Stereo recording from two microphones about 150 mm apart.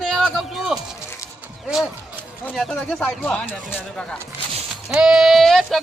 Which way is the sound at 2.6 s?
5° left (ahead or behind).